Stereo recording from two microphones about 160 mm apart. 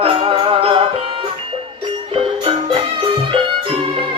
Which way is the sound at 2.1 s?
35° right (ahead or behind).